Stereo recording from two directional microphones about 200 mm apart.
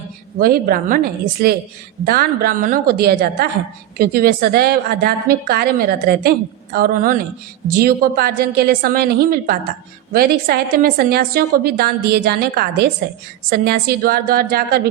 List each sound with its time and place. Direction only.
0.3 s a woman's voice: 45° right (ahead or behind)